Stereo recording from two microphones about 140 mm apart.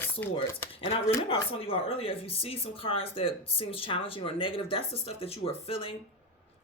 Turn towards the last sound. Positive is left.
turn(degrees=45)  # may be behind; listen again after turning